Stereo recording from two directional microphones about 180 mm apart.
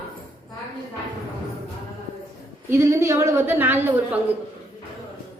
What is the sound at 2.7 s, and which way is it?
A woman's voice, 15° right (ahead or behind).